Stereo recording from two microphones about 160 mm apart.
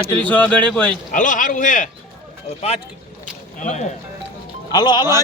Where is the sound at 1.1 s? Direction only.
55° left (ahead or behind).